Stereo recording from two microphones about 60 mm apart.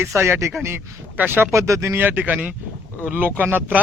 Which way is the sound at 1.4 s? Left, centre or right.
Right.